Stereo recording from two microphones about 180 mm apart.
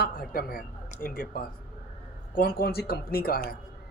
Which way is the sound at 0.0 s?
55° left (ahead or behind).